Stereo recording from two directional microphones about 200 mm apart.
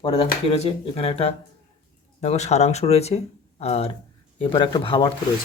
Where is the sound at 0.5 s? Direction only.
30° left (ahead or behind).